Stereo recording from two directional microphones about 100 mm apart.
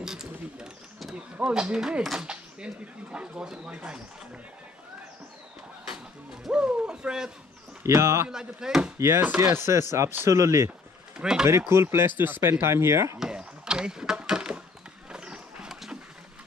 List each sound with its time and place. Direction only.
0.0 s a sound: 5° right (ahead or behind)
1.1 s speech: 10° right (ahead or behind)
6.4 s speech: 10° right (ahead or behind)
7.8 s speech: 30° right (ahead or behind)
8.3 s speech: 5° right (ahead or behind)
8.9 s speech: 25° right (ahead or behind)
11.1 s speech: 5° right (ahead or behind)
11.4 s speech: 25° right (ahead or behind)
13.2 s a sound: 10° right (ahead or behind)
15.0 s horse: 10° right (ahead or behind)